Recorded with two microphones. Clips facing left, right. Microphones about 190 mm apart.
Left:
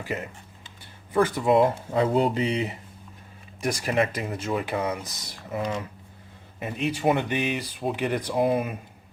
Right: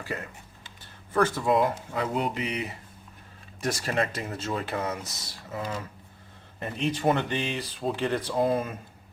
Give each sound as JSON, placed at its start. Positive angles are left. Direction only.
{"t": 0.0, "sound": "speech", "side_deg": 15}
{"t": 3.6, "sound": "speech", "side_deg": 15}
{"t": 6.6, "sound": "speech", "side_deg": 5}